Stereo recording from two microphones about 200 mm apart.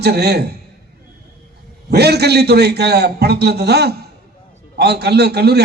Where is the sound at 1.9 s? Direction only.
55° right (ahead or behind).